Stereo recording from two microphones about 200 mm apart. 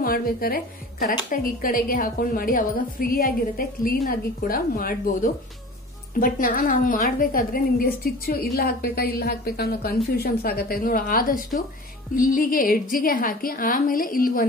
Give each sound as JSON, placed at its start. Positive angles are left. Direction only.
{"t": 0.0, "sound": "a woman's voice", "side_deg": 45}